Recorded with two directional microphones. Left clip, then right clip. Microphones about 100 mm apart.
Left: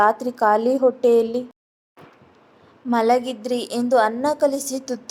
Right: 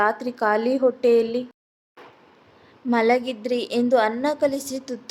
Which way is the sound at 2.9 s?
15° left (ahead or behind).